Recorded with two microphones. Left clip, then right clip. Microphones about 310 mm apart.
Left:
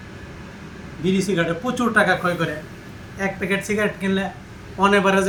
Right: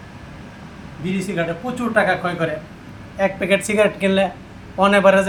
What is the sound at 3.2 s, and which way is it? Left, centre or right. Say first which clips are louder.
A man's voice: right 6 dB; centre.